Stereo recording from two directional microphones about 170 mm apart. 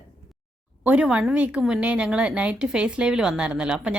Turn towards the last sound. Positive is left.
turn(degrees=-5)  # may be behind; listen again after turning